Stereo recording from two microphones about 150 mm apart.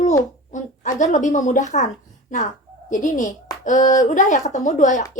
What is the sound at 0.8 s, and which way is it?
A woman's voice, 55° left (ahead or behind).